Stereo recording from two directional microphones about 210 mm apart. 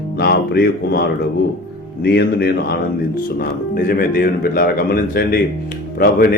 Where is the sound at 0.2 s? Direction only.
50° left (ahead or behind).